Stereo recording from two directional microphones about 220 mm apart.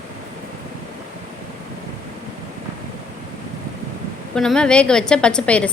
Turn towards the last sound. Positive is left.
turn(degrees=5)  # may be behind; listen again after turning